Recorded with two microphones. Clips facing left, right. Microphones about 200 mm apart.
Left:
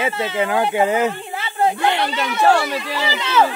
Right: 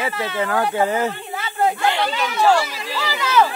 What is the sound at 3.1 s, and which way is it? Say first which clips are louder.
Speech: even; 25° left (ahead or behind).